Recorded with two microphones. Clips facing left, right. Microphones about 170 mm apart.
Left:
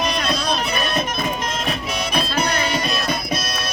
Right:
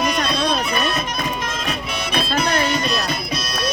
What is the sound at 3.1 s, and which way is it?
Music, 50° left (ahead or behind).